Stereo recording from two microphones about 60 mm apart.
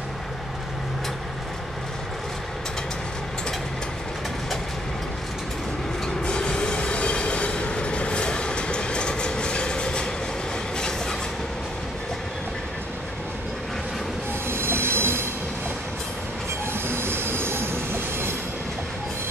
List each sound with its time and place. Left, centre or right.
6.0 s train: centre
14.5 s train: right
16.7 s train: right